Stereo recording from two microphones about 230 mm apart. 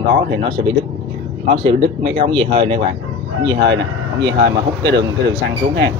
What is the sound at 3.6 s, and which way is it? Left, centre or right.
Speech, right.